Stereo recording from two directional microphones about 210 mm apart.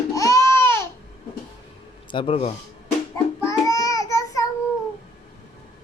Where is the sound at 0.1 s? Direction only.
15° left (ahead or behind).